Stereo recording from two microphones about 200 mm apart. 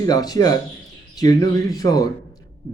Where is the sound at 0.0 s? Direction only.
20° left (ahead or behind).